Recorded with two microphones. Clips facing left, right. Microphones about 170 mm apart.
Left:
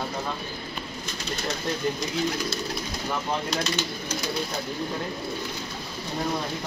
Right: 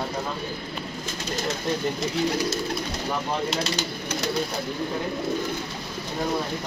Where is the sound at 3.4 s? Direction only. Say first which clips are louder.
Right 1 dB; 30° right (ahead or behind).